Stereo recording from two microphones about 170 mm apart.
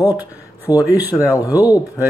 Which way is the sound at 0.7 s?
10° right (ahead or behind).